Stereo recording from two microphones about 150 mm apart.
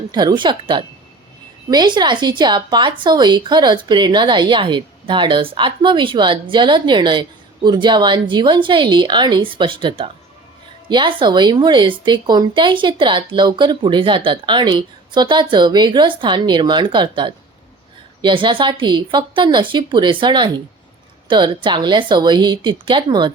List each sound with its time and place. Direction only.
0.1 s speech: 30° right (ahead or behind)